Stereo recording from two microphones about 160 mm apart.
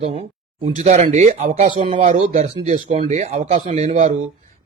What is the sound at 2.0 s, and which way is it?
Speech, 50° right (ahead or behind).